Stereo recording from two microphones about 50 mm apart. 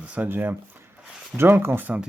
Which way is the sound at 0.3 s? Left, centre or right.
Right.